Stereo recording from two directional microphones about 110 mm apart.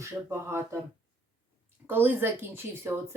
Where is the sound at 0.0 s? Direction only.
20° right (ahead or behind).